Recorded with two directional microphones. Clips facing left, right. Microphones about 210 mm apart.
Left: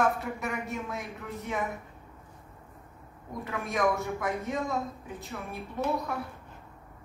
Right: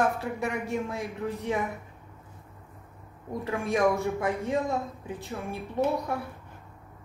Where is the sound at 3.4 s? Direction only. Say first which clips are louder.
Right 4 dB; 30° right (ahead or behind).